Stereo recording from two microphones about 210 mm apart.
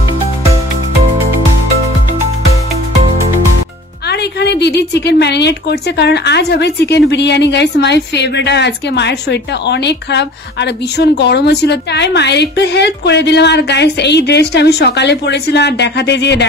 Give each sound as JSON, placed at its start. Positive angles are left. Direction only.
{"t": 4.1, "sound": "a woman's voice", "side_deg": 50}